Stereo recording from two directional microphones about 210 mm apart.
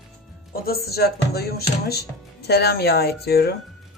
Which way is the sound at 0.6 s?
45° left (ahead or behind).